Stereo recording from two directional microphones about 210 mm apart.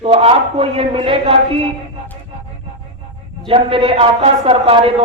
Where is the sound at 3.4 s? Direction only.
25° right (ahead or behind).